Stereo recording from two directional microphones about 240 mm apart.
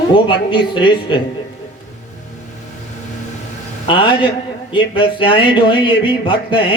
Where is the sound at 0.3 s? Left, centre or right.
Centre.